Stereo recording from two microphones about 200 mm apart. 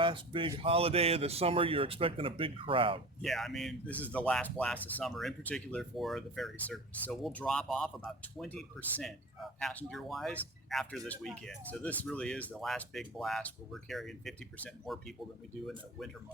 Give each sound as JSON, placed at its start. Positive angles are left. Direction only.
{"t": 0.0, "sound": "speech", "side_deg": -25}
{"t": 3.2, "sound": "speech", "side_deg": 0}